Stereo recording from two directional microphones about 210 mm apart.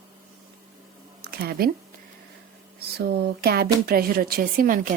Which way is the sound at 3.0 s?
50° right (ahead or behind).